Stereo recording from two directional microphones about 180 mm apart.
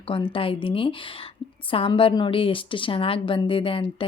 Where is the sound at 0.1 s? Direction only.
30° left (ahead or behind).